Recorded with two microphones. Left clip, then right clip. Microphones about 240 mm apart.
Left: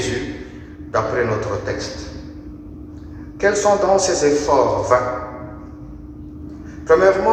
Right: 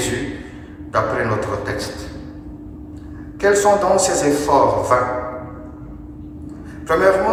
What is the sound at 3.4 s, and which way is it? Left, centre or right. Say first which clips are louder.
A man's voice: right 1 dB; right.